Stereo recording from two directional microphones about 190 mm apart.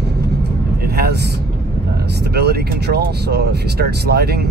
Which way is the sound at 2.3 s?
55° right (ahead or behind).